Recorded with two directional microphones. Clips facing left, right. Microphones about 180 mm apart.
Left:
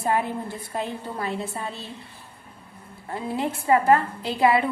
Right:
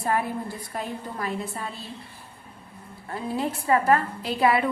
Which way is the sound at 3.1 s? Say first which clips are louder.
Left 1 dB; 25° left (ahead or behind).